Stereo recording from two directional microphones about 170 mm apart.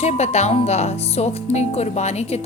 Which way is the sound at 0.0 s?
40° left (ahead or behind).